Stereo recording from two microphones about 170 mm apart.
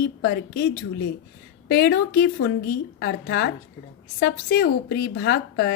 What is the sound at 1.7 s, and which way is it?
A woman's voice, 70° left (ahead or behind).